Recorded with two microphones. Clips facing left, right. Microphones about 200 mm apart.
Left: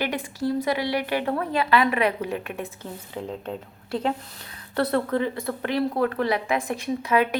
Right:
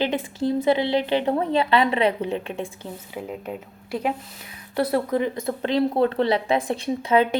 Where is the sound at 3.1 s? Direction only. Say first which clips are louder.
Even; 10° right (ahead or behind).